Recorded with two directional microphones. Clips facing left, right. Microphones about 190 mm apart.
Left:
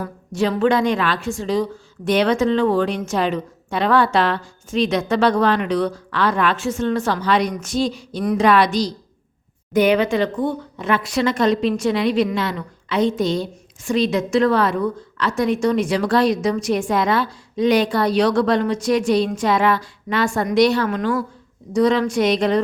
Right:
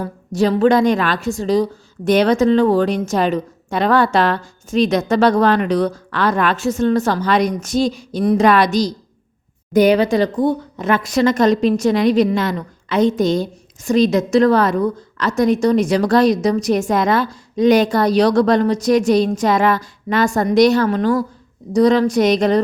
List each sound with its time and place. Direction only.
0.0 s a woman's voice: 40° right (ahead or behind)